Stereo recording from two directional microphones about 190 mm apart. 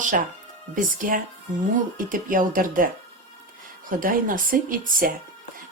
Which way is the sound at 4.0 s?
45° right (ahead or behind).